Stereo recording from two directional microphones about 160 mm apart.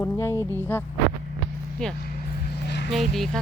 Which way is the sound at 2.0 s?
70° left (ahead or behind).